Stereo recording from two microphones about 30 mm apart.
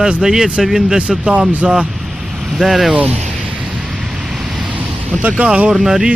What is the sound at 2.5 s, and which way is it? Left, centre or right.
Speech, centre.